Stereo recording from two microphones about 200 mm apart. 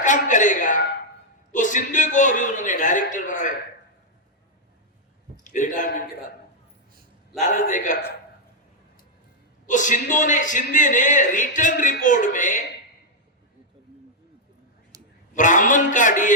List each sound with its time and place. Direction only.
0.0 s a man's voice: 40° left (ahead or behind)
5.4 s a man's voice: 40° left (ahead or behind)
7.4 s a man's voice: 40° left (ahead or behind)
9.6 s a man's voice: 40° left (ahead or behind)
14.9 s a sound: 15° right (ahead or behind)
15.4 s a man's voice: 40° left (ahead or behind)